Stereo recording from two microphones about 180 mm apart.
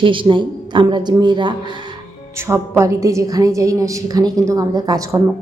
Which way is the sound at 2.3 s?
15° right (ahead or behind).